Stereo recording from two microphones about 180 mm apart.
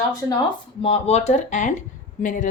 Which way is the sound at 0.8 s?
35° left (ahead or behind).